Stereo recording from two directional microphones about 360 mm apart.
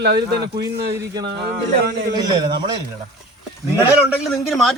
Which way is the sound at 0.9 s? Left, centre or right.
Centre.